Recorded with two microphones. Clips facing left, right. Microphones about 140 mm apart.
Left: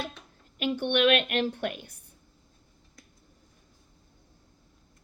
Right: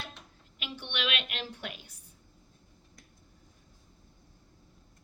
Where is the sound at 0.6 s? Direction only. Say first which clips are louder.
Left 13 dB; 50° left (ahead or behind).